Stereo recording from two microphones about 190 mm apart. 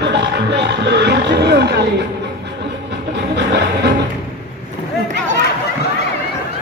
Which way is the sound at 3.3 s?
65° right (ahead or behind).